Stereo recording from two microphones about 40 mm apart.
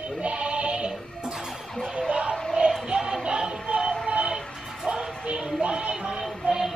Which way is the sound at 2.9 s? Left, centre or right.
Centre.